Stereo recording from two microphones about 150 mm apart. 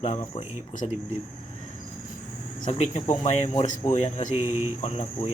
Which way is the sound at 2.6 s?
45° left (ahead or behind).